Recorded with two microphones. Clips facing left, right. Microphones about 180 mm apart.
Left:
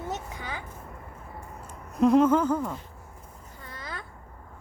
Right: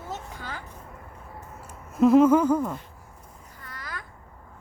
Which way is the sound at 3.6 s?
25° left (ahead or behind).